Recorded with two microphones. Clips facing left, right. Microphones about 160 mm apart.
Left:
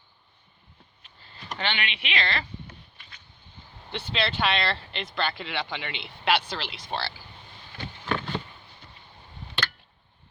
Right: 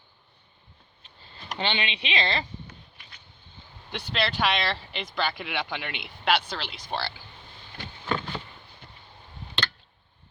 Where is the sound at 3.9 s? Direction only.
10° right (ahead or behind).